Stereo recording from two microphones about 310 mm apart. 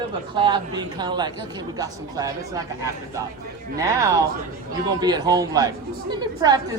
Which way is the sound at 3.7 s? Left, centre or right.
Centre.